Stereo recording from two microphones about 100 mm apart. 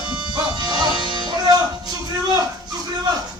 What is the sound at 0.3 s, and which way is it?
Music, 45° right (ahead or behind).